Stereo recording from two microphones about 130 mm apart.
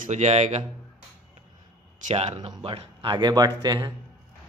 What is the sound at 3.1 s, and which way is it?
Speech, 30° right (ahead or behind).